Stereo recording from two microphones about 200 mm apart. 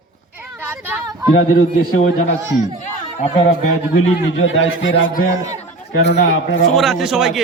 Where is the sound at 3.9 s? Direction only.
70° left (ahead or behind).